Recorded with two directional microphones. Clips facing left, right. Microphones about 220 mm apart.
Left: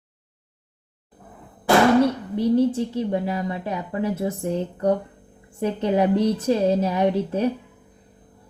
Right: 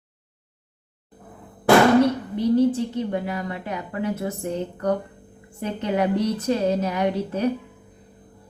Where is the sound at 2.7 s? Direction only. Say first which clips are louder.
Left 1 dB; 25° left (ahead or behind).